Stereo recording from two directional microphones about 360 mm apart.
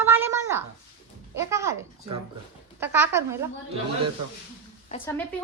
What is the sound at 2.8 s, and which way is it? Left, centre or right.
Speech, centre.